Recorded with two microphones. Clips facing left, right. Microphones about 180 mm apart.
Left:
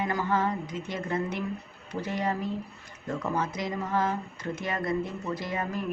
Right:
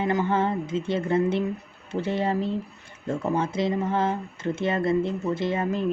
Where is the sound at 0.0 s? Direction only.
25° right (ahead or behind).